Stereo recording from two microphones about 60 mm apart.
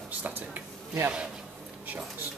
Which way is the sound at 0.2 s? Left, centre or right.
Right.